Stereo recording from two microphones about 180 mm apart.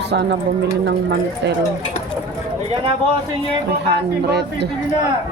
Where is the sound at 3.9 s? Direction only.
65° right (ahead or behind).